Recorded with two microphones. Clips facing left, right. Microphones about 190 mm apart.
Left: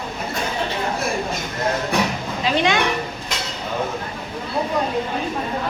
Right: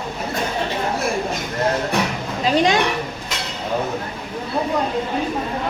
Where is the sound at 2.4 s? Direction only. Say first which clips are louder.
Right 3 dB; 40° right (ahead or behind).